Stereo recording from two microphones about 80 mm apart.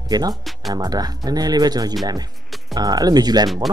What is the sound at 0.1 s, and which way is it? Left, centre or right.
Speech, right.